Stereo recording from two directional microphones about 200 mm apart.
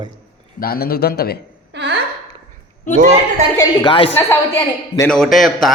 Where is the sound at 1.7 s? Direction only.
55° right (ahead or behind).